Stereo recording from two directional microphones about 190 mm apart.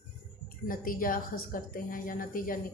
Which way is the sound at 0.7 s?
50° left (ahead or behind).